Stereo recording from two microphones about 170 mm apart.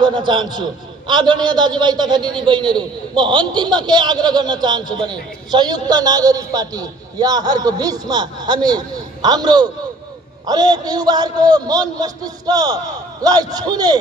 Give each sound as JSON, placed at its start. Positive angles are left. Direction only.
{"t": 0.0, "sound": "a man's voice", "side_deg": -25}